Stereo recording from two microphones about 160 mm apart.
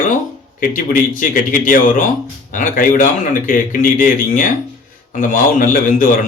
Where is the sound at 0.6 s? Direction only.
55° left (ahead or behind).